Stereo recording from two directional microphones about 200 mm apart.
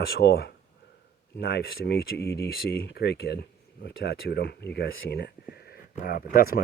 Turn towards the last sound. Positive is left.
turn(degrees=45)  # may be behind; listen again after turning